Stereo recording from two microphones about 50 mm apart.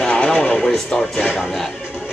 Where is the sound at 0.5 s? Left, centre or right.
Centre.